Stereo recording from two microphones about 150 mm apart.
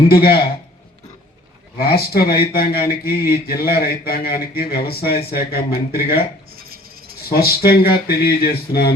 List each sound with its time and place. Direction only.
0.1 s speech: 90° left
1.8 s speech: 90° left
7.3 s speech: 90° left